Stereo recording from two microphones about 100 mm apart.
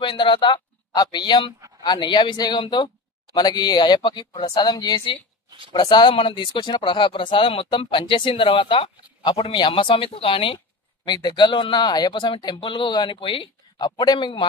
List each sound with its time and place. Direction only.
0.0 s a man's voice: 55° left (ahead or behind)
0.9 s speech: 45° left (ahead or behind); by 10.6 s 60° left (ahead or behind)
11.1 s speech: 45° left (ahead or behind)
12.5 s speech: 55° left (ahead or behind)
13.8 s speech: 45° left (ahead or behind)